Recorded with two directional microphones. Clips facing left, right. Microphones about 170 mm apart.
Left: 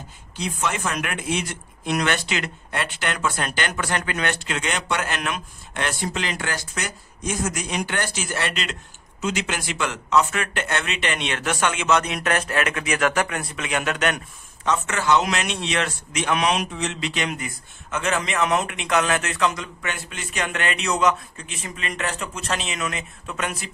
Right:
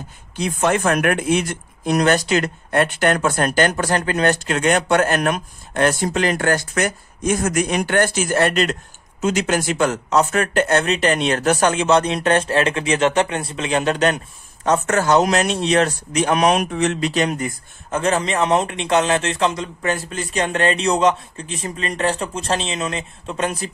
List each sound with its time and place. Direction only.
0.4 s speech: 55° right (ahead or behind); by 23.7 s 30° right (ahead or behind)